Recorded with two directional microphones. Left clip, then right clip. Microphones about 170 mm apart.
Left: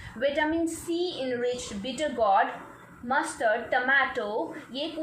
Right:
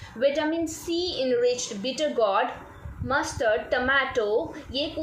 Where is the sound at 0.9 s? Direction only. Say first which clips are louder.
Right 3 dB; 90° right.